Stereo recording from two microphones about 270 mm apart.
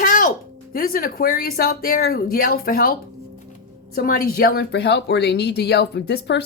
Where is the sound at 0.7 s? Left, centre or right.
Left.